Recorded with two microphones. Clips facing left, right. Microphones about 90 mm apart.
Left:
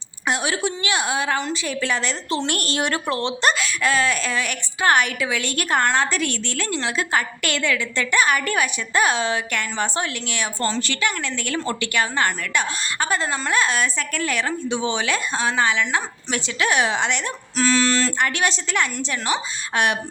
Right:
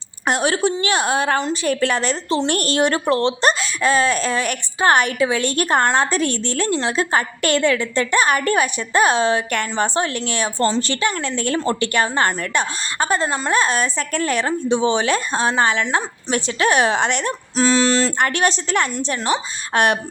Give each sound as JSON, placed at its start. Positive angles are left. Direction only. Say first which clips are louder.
{"t": 0.3, "sound": "a woman's voice", "louder": "right 5 dB", "side_deg": -45}
{"t": 2.5, "sound": "a woman's voice", "louder": "right 5 dB", "side_deg": -35}
{"t": 13.2, "sound": "a sound", "louder": "right 3 dB", "side_deg": -20}
{"t": 13.5, "sound": "a woman's voice", "louder": "right 2 dB", "side_deg": -35}
{"t": 15.8, "sound": "a woman's voice", "louder": "right 2 dB", "side_deg": -35}
{"t": 17.6, "sound": "a sound", "louder": "right 3 dB", "side_deg": -20}
{"t": 18.2, "sound": "a woman's voice", "louder": "right 3 dB", "side_deg": -45}